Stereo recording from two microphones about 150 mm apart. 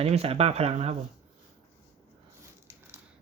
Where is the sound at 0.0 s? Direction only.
40° right (ahead or behind).